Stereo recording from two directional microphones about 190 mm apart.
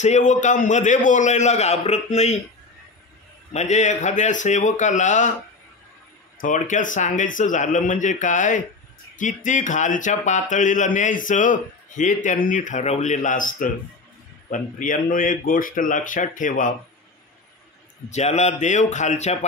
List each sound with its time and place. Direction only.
0.0 s speech: 40° left (ahead or behind)
3.5 s speech: 35° left (ahead or behind)
6.4 s speech: 45° left (ahead or behind)
18.1 s speech: 35° left (ahead or behind)